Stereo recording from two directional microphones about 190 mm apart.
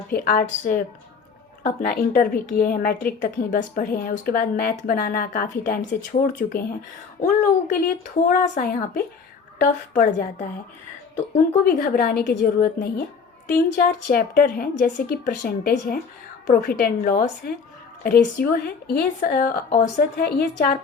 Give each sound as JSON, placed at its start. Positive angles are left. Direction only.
{"t": 0.1, "sound": "speech", "side_deg": 50}
{"t": 11.6, "sound": "speech", "side_deg": 50}